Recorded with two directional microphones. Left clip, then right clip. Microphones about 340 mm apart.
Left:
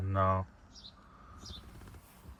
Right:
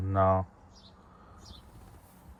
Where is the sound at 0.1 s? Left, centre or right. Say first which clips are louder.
Right 5 dB; centre.